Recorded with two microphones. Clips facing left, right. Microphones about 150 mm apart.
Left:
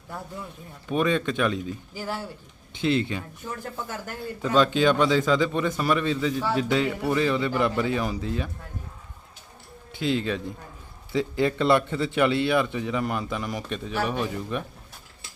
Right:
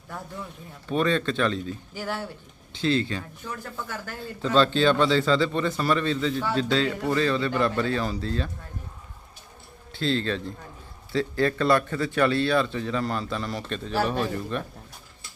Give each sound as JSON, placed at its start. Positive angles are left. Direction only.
{"t": 0.9, "sound": "speech", "side_deg": 10}
{"t": 2.8, "sound": "speech", "side_deg": 15}
{"t": 10.0, "sound": "speech", "side_deg": 15}